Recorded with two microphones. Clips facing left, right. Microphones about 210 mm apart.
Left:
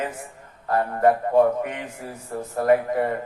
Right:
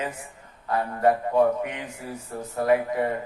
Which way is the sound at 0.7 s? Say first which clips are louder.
Left 3 dB; 50° left (ahead or behind).